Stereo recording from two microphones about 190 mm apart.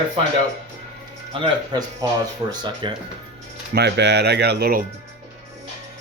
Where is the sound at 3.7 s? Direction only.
60° right (ahead or behind).